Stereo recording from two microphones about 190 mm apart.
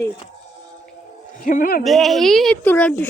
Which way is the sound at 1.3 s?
45° left (ahead or behind).